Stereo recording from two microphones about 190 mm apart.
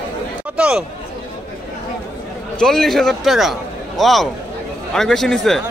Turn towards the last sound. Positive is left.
turn(degrees=0)  # may be behind; listen again after turning